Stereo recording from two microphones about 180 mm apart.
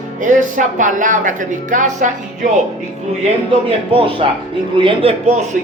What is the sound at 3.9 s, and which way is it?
Speech, 30° right (ahead or behind).